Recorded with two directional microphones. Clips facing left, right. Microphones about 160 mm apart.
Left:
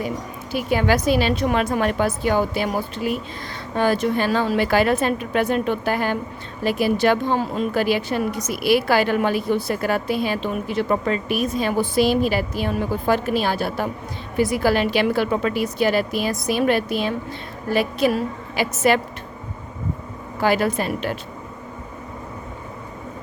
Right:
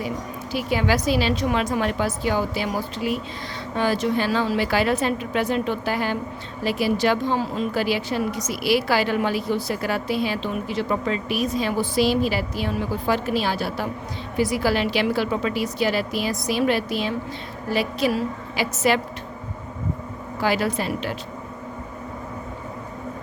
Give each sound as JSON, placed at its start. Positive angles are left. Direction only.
{"t": 0.5, "sound": "speech", "side_deg": 50}
{"t": 20.4, "sound": "speech", "side_deg": 50}